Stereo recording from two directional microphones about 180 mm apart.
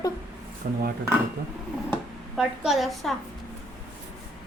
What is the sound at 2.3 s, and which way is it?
Speech, 5° right (ahead or behind).